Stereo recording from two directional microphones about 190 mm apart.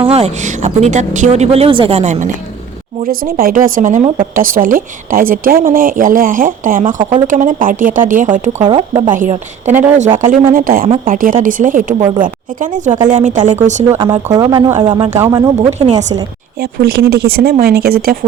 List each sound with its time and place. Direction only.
0.0 s a woman's voice: 30° right (ahead or behind)
3.0 s speech: 50° right (ahead or behind)
8.6 s speech: 25° right (ahead or behind)
9.1 s a woman's voice: 40° right (ahead or behind)
10.8 s speech: 30° right (ahead or behind)
11.1 s speech: 45° right (ahead or behind)
11.9 s speech: 25° right (ahead or behind)
12.2 s a woman's voice: 45° right (ahead or behind)
13.9 s speech: 15° right (ahead or behind)
15.5 s a woman's voice: 35° right (ahead or behind)
16.6 s speech: 55° right (ahead or behind)